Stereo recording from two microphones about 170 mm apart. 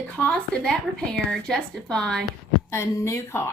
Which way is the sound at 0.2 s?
5° left (ahead or behind).